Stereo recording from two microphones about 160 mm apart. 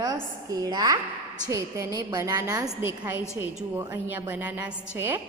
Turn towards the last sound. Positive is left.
turn(degrees=-15)  # may be behind; listen again after turning